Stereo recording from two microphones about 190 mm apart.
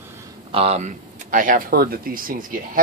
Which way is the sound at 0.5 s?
35° right (ahead or behind).